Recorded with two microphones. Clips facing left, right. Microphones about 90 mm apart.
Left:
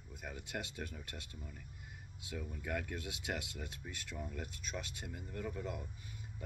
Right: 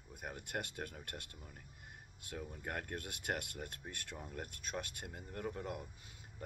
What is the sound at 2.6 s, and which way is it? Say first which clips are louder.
Speech: left 3 dB; 45° right (ahead or behind).